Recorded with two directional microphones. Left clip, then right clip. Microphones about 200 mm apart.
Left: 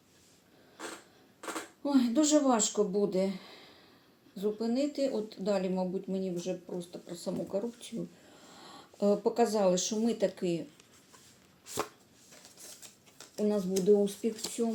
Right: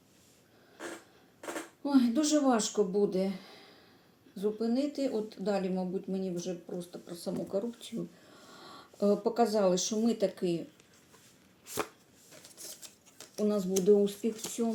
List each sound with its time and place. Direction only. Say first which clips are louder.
1.8 s speech: even; 5° right (ahead or behind)
13.1 s speech: even; 5° right (ahead or behind)